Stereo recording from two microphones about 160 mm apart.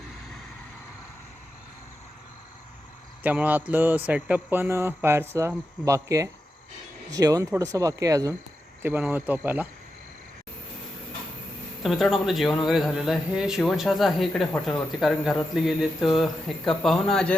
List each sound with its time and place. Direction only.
3.2 s speech: 10° right (ahead or behind)
11.8 s speech: centre (ahead or behind)